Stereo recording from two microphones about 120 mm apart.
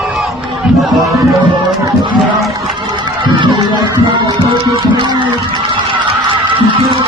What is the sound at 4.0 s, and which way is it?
Music, 40° right (ahead or behind).